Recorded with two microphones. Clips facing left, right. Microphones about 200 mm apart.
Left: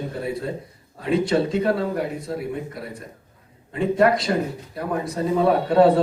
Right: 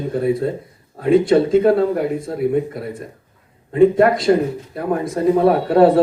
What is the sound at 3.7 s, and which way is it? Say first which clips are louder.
Speech: right 7 dB; 50° right (ahead or behind).